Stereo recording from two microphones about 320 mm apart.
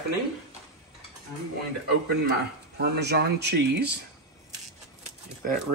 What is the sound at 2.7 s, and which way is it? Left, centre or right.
Speech, right.